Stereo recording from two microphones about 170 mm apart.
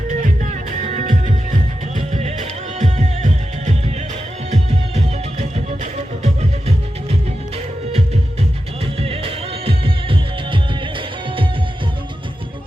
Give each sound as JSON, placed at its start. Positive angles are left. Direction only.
{"t": 0.1, "sound": "music", "side_deg": -45}
{"t": 2.1, "sound": "music", "side_deg": -40}